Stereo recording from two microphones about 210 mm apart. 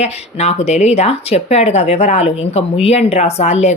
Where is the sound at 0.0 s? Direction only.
30° left (ahead or behind).